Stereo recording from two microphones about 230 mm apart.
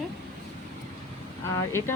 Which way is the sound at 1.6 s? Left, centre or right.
Centre.